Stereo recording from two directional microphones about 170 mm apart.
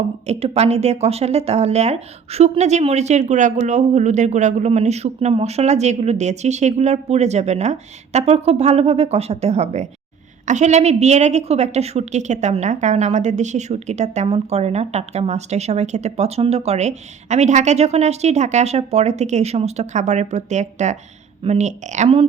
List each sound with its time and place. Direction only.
0.3 s a woman's voice: 35° right (ahead or behind)